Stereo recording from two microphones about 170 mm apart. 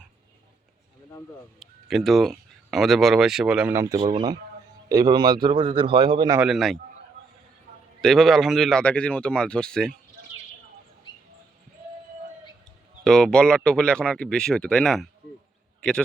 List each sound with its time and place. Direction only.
1.5 s speech: centre (ahead or behind)
3.8 s a man's voice: 20° right (ahead or behind)
6.4 s speech: centre (ahead or behind)
8.0 s speech: centre (ahead or behind)
13.1 s a man's voice: 5° left (ahead or behind)